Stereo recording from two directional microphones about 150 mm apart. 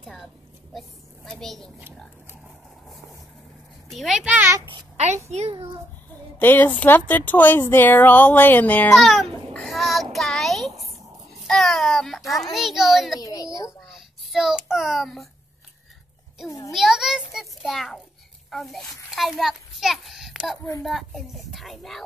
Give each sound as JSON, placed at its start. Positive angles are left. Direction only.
{"t": 0.0, "sound": "a woman's voice", "side_deg": 0}
{"t": 3.9, "sound": "a child's voice", "side_deg": 0}
{"t": 4.6, "sound": "a child's voice", "side_deg": -45}
{"t": 6.3, "sound": "speech", "side_deg": 10}
{"t": 8.9, "sound": "a sound", "side_deg": 0}
{"t": 10.1, "sound": "child singing", "side_deg": 0}
{"t": 11.4, "sound": "a child's voice", "side_deg": 5}
{"t": 13.2, "sound": "a woman's voice", "side_deg": 25}
{"t": 13.8, "sound": "a child's voice", "side_deg": -5}
{"t": 16.4, "sound": "a woman's voice", "side_deg": 20}
{"t": 16.7, "sound": "a child's voice", "side_deg": 0}